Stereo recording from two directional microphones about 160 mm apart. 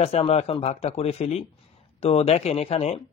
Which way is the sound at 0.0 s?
40° left (ahead or behind).